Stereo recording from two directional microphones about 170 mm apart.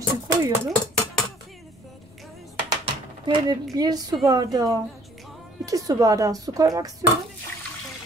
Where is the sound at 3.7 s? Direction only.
25° right (ahead or behind).